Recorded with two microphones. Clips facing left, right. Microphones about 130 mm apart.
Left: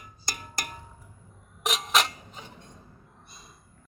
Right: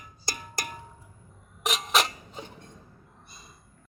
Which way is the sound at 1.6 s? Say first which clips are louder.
Even; centre (ahead or behind).